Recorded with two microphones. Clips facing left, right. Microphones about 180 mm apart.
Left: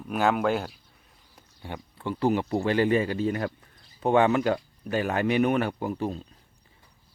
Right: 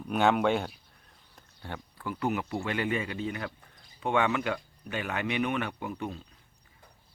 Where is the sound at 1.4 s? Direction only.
15° left (ahead or behind).